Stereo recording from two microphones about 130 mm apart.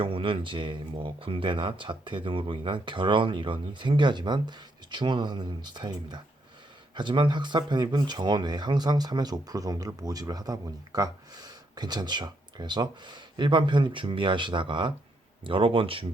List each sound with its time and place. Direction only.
0.0 s speech: 45° right (ahead or behind)